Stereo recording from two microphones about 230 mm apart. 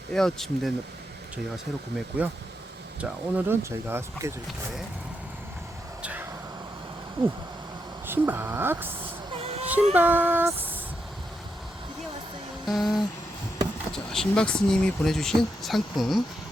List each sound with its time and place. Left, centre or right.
0.1 s speech: centre
2.0 s speech: centre
6.0 s vehicle: centre
8.0 s speech: centre
9.4 s a sound: right
9.9 s speech: centre
12.6 s speech: centre